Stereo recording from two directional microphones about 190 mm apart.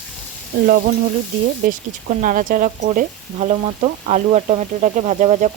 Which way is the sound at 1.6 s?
45° right (ahead or behind).